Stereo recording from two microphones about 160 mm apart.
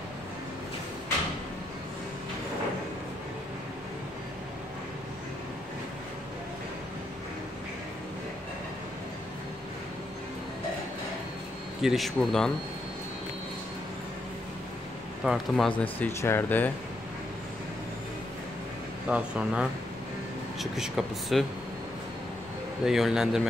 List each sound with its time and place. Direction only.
11.8 s speech: centre (ahead or behind)
15.2 s speech: centre (ahead or behind)
19.0 s speech: 5° right (ahead or behind)
22.8 s speech: 5° right (ahead or behind)